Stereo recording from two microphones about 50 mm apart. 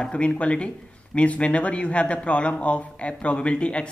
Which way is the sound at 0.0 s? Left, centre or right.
Left.